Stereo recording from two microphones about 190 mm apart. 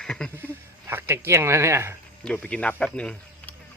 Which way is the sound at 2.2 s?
5° left (ahead or behind).